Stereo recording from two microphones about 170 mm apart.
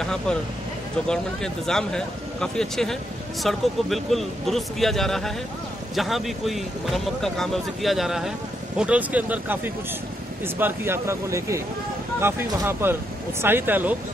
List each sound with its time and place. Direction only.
0.0 s speech: 5° left (ahead or behind); by 13.9 s 10° right (ahead or behind)